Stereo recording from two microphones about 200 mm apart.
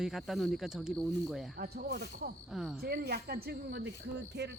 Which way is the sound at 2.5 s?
Centre (ahead or behind).